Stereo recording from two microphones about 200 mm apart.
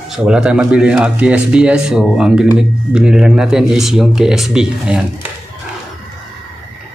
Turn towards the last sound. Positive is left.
turn(degrees=-5)  # may be behind; listen again after turning